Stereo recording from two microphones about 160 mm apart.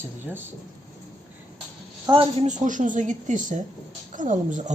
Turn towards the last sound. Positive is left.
turn(degrees=-50)  # may be behind; listen again after turning